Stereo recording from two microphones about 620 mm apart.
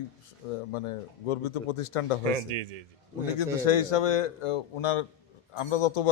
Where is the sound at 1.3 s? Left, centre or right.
Left.